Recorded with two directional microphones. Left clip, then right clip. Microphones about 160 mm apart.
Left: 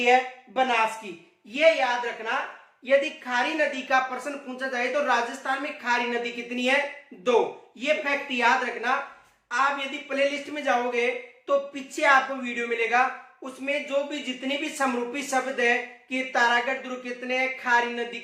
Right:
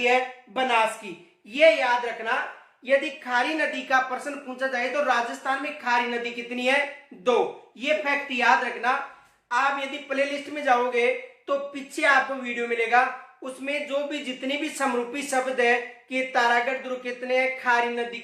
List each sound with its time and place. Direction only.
0.0 s a woman's voice: 20° right (ahead or behind); by 18.2 s 5° right (ahead or behind)